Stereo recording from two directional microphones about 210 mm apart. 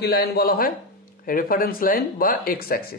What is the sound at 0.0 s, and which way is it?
Speech, 50° left (ahead or behind).